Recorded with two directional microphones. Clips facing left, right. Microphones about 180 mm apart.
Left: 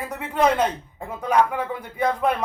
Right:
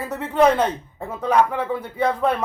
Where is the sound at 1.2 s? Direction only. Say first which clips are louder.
Right 2 dB; 30° right (ahead or behind).